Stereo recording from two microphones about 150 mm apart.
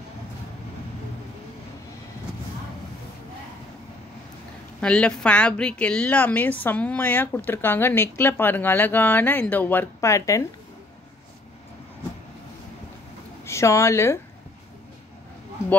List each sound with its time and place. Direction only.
4.7 s speech: 5° left (ahead or behind)
13.5 s speech: 20° left (ahead or behind)